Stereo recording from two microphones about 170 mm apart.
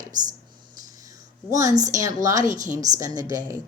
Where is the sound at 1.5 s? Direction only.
20° right (ahead or behind).